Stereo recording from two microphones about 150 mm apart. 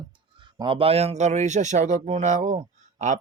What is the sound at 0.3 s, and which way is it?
Speech, 35° right (ahead or behind).